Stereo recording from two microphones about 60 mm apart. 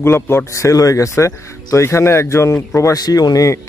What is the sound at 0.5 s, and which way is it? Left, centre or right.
Speech, left.